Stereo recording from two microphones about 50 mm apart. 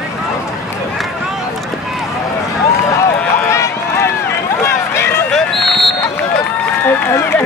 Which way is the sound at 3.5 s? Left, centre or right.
Left.